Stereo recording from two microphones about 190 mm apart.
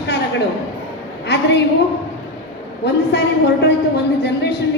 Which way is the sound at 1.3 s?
65° left (ahead or behind).